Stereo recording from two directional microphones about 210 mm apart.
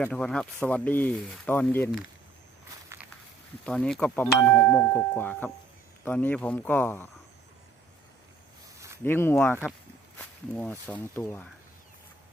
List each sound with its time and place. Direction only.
0.0 s speech: 5° left (ahead or behind)
3.7 s speech: 5° left (ahead or behind)
9.0 s speech: 10° left (ahead or behind)